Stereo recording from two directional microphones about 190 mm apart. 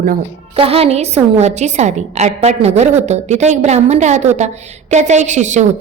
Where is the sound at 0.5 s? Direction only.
30° right (ahead or behind).